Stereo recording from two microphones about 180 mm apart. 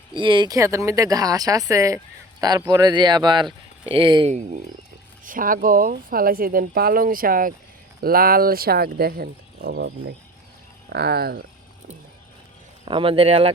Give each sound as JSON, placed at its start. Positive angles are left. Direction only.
{"t": 0.1, "sound": "speech", "side_deg": -25}
{"t": 5.2, "sound": "speech", "side_deg": -50}
{"t": 12.8, "sound": "speech", "side_deg": -30}